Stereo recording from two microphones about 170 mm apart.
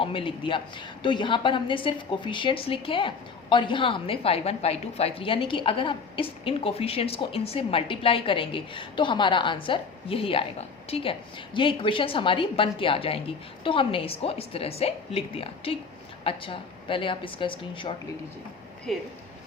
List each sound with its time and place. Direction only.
0.0 s a woman's voice: 30° left (ahead or behind)
18.9 s speech: centre (ahead or behind)